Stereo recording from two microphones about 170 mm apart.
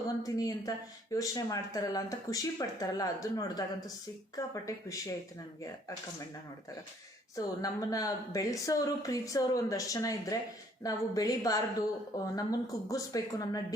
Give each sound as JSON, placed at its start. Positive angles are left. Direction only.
{"t": 0.2, "sound": "a woman's voice", "side_deg": 20}
{"t": 7.3, "sound": "a woman's voice", "side_deg": 20}